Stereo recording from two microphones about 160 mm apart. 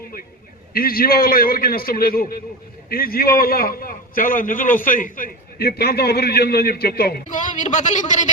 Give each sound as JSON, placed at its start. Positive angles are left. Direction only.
{"t": 0.7, "sound": "a man's voice", "side_deg": 65}